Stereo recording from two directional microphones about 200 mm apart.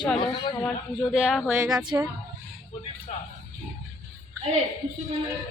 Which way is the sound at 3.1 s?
35° left (ahead or behind).